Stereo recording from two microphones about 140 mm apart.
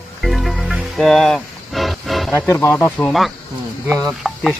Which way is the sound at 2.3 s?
20° left (ahead or behind).